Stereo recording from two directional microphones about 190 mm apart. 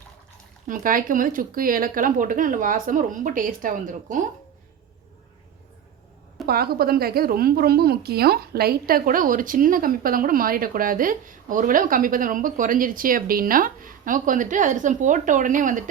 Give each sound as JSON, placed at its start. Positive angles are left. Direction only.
{"t": 0.7, "sound": "a woman's voice", "side_deg": -45}
{"t": 6.4, "sound": "a woman's voice", "side_deg": -55}